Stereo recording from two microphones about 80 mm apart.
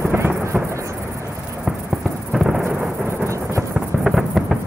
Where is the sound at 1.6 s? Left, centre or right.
Centre.